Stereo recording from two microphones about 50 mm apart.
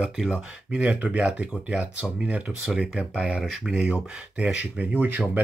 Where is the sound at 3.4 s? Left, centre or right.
Centre.